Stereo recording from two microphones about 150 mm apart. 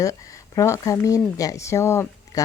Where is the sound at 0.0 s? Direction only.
20° left (ahead or behind).